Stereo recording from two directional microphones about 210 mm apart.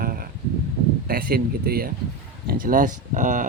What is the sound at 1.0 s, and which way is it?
Speech, 45° right (ahead or behind).